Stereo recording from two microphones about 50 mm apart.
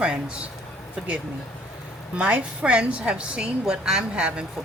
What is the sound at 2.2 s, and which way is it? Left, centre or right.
Speech, right.